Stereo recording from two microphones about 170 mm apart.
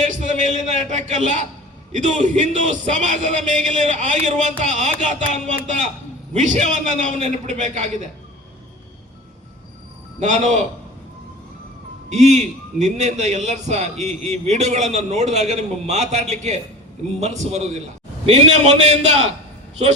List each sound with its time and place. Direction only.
0.1 s a sound: 45° right (ahead or behind)
1.9 s speech: 45° right (ahead or behind)
10.2 s speech: 45° right (ahead or behind)
12.0 s a man's voice: 40° right (ahead or behind)